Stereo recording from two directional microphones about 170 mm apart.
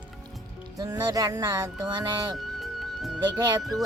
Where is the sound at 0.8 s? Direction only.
25° right (ahead or behind).